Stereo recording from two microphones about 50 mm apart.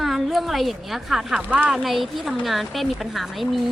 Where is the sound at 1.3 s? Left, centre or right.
Right.